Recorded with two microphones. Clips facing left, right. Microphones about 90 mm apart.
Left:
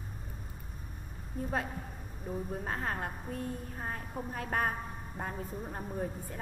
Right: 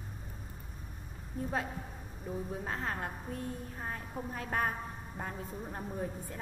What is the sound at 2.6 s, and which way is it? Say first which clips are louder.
A woman's voice: left 2 dB; 45° left (ahead or behind).